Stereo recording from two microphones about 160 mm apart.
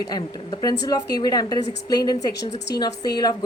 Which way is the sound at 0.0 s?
25° left (ahead or behind).